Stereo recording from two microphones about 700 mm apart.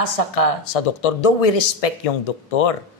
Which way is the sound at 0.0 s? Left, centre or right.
Left.